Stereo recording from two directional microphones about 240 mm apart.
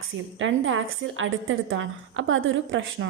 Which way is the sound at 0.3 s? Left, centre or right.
Right.